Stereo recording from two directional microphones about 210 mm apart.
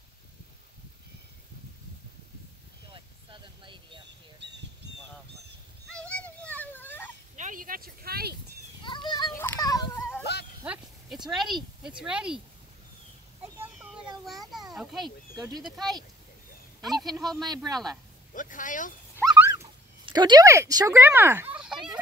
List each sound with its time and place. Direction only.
2.9 s vehicle: 25° right (ahead or behind)
5.9 s a sound: 5° left (ahead or behind)
7.3 s a sound: 40° right (ahead or behind)
8.8 s children playing: 20° left (ahead or behind)
10.6 s a sound: 5° right (ahead or behind)
11.2 s speech: centre (ahead or behind)
13.7 s children playing: centre (ahead or behind)
15.3 s speech: 20° right (ahead or behind)
15.6 s speech: centre (ahead or behind)
18.3 s speech: 40° left (ahead or behind)
19.2 s dog: 10° right (ahead or behind)